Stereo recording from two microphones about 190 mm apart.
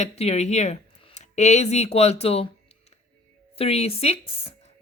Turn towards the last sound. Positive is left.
turn(degrees=30)  # may be behind; listen again after turning